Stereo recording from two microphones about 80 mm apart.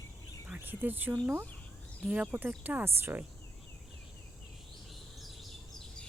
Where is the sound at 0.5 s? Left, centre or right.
Right.